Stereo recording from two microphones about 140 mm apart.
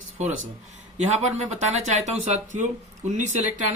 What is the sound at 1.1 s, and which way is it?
Speech, 55° right (ahead or behind).